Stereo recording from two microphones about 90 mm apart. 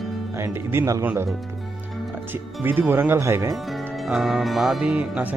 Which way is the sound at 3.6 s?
Centre (ahead or behind).